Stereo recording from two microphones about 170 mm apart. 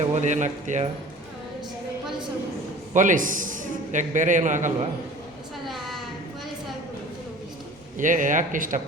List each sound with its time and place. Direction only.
0.1 s a man's voice: 45° right (ahead or behind)
2.9 s a man's voice: 50° right (ahead or behind)
5.6 s a sound: centre (ahead or behind)
7.9 s a man's voice: 50° right (ahead or behind)